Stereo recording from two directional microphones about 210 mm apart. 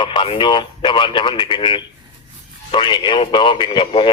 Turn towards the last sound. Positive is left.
turn(degrees=25)  # may be behind; listen again after turning